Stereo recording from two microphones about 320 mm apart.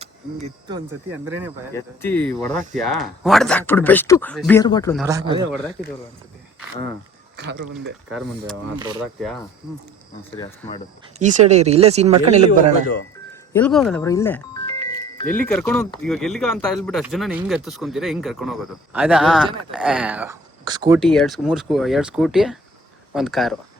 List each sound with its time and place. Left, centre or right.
0.0 s speech: centre
1.7 s speech: centre
4.9 s speech: centre
7.3 s speech: right
11.2 s speech: right
13.5 s music: centre
15.3 s speech: centre
21.0 s speech: centre